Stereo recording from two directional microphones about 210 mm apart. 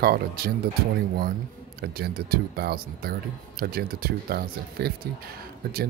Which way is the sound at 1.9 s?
45° right (ahead or behind).